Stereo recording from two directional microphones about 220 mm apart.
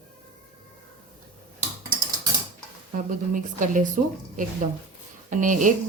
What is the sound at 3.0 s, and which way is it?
Speech, 35° right (ahead or behind).